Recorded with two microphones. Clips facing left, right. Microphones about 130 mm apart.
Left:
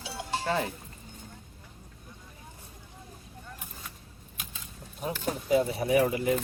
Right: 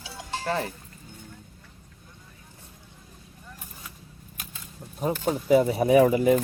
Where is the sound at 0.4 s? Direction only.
Centre (ahead or behind).